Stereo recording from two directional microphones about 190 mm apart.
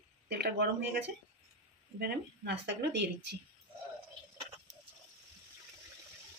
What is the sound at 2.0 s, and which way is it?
Speech, 60° right (ahead or behind).